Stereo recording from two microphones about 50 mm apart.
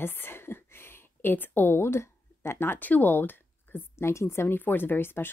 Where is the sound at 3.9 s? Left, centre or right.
Left.